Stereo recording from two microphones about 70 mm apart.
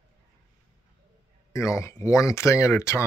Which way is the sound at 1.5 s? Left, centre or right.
Left.